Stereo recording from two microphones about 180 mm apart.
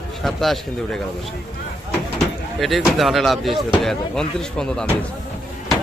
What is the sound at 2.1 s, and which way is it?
Speech, centre (ahead or behind).